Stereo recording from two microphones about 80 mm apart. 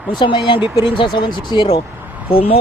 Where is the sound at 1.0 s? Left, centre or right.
Left.